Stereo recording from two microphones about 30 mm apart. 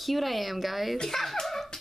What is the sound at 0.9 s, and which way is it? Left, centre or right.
Speech, centre.